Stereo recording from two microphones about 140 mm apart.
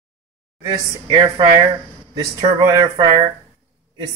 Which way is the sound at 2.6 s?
30° right (ahead or behind).